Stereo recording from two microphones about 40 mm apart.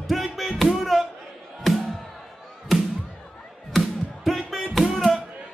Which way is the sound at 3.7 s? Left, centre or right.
Centre.